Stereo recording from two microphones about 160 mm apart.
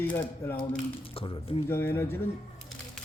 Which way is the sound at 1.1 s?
35° left (ahead or behind).